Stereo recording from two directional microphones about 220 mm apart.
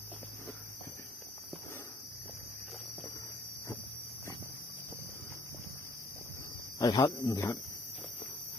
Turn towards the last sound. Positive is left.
turn(degrees=15)  # may be behind; listen again after turning